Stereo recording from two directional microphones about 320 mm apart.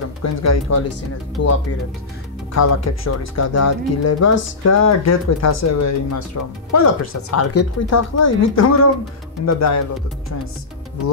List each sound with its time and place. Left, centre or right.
0.2 s speech: left